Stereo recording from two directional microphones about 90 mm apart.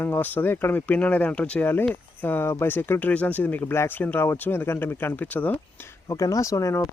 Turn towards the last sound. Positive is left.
turn(degrees=35)  # may be behind; listen again after turning